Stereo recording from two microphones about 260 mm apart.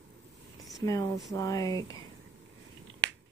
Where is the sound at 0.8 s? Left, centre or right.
Centre.